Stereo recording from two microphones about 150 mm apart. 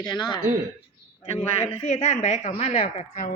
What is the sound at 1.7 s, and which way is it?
A woman's voice, 40° left (ahead or behind).